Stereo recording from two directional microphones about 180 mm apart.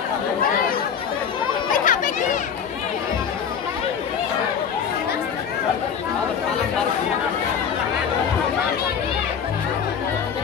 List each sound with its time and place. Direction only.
1.7 s chatter: 50° left (ahead or behind)